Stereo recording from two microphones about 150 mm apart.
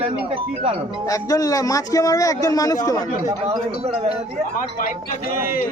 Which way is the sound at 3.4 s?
40° right (ahead or behind).